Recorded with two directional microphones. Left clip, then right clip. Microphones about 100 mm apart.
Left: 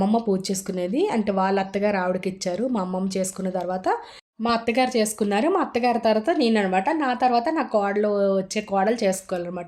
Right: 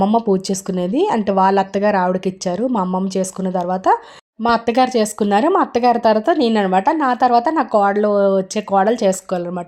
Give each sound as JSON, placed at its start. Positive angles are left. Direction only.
{"t": 0.0, "sound": "speech", "side_deg": -40}